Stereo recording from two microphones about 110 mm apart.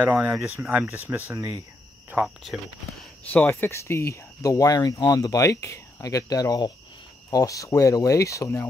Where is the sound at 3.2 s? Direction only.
15° left (ahead or behind).